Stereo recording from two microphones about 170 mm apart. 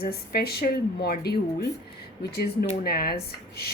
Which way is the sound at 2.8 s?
60° left (ahead or behind).